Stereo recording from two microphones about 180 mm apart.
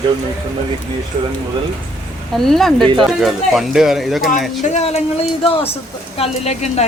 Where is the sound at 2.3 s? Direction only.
Centre (ahead or behind).